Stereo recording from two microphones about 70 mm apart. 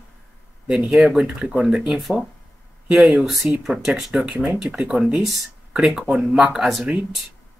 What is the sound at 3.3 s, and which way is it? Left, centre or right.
Speech, centre.